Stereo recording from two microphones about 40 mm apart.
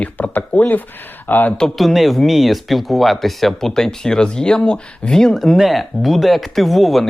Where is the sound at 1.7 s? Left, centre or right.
Centre.